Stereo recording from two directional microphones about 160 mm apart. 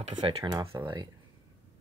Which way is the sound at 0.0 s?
40° right (ahead or behind).